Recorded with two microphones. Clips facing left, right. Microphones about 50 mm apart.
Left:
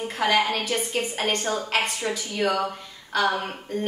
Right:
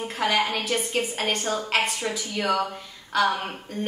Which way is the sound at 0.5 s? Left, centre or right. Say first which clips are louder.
Even; centre.